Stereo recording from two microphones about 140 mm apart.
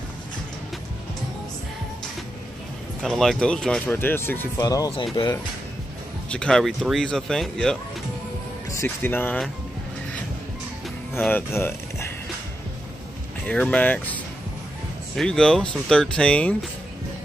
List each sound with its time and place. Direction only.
3.0 s speech: centre (ahead or behind)
4.6 s speech: 25° left (ahead or behind)
6.3 s speech: 5° left (ahead or behind)
8.6 s speech: 20° left (ahead or behind)
11.1 s speech: 15° left (ahead or behind)
13.5 s speech: 10° left (ahead or behind)